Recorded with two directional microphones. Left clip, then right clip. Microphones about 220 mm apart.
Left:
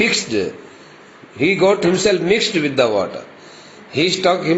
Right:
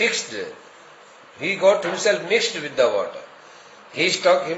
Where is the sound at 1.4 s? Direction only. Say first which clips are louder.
Left 3 dB; 20° left (ahead or behind).